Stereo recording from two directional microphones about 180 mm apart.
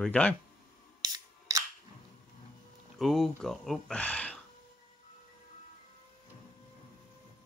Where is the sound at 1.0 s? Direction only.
20° right (ahead or behind).